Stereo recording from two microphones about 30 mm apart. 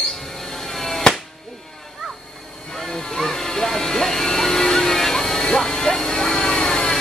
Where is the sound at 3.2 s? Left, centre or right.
Centre.